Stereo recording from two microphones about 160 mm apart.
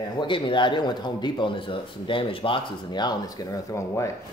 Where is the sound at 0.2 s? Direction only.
30° left (ahead or behind).